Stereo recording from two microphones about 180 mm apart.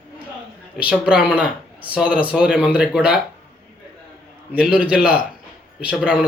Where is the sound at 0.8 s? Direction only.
5° right (ahead or behind).